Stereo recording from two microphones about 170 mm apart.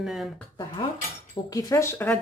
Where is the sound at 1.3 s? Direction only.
20° left (ahead or behind).